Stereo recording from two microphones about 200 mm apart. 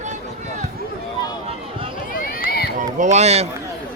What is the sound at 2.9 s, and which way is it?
Speech, 35° right (ahead or behind).